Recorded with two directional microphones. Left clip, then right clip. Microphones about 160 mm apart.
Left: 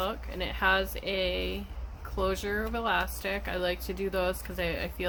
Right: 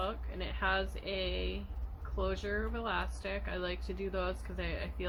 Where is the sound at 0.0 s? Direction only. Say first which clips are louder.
Left 6 dB; 60° left (ahead or behind).